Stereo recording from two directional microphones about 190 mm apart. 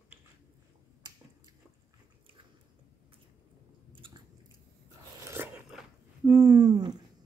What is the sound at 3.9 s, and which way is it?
Chewing, 25° right (ahead or behind).